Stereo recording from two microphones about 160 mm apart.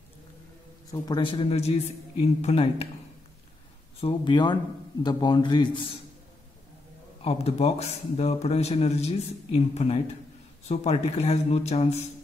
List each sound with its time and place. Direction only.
1.0 s a man's voice: 30° left (ahead or behind)
4.0 s a man's voice: 30° left (ahead or behind)
7.2 s a man's voice: 40° left (ahead or behind)